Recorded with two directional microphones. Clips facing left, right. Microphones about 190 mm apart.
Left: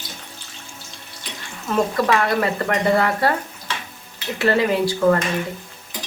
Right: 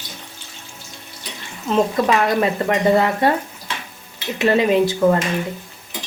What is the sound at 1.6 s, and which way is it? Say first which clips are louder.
Speech: right 2 dB; 20° right (ahead or behind).